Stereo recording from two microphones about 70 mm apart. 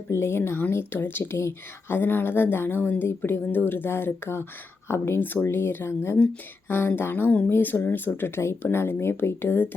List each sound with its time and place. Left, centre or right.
0.1 s a woman's voice: left